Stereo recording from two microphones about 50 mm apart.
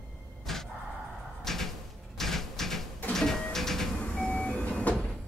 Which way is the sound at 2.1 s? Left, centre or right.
Centre.